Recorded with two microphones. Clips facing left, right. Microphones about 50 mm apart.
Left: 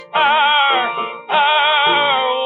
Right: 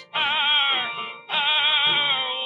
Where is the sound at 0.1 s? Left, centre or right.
Left.